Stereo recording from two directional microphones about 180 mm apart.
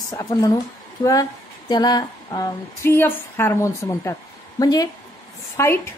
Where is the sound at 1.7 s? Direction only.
20° left (ahead or behind).